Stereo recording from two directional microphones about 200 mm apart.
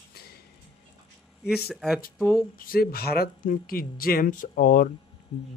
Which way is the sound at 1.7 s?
Centre (ahead or behind).